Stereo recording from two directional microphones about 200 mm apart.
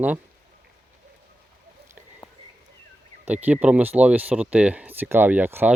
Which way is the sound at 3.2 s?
5° right (ahead or behind).